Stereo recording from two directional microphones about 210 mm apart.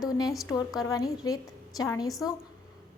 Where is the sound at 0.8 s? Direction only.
15° left (ahead or behind).